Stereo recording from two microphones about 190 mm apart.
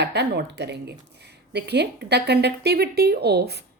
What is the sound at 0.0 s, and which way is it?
A woman's voice, 65° right (ahead or behind).